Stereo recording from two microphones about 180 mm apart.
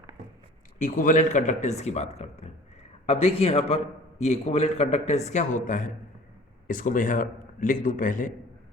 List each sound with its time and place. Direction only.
0.8 s a man's voice: 45° left (ahead or behind)